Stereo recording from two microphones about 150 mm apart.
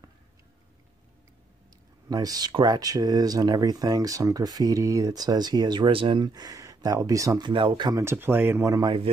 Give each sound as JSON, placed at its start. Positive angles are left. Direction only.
{"t": 2.0, "sound": "speech", "side_deg": -25}
{"t": 8.0, "sound": "speech", "side_deg": -15}